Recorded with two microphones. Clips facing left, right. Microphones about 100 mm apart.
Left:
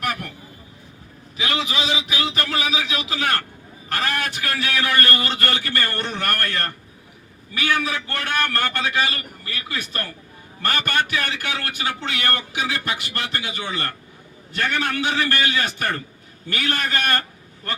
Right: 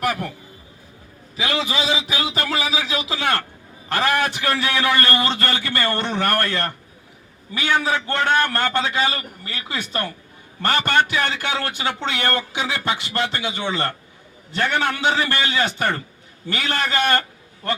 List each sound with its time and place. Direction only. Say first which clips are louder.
0.0 s a man's voice: right 4 dB; 25° right (ahead or behind)
1.4 s a man's voice: right 2 dB; 35° right (ahead or behind)